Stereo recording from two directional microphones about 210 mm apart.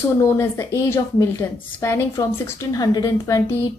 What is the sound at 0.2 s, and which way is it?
A woman's voice, 15° left (ahead or behind).